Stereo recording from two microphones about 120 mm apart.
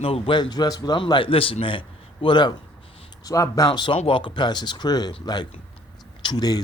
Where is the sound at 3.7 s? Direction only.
45° left (ahead or behind).